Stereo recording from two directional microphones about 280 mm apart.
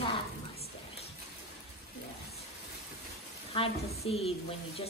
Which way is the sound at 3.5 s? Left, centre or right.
Left.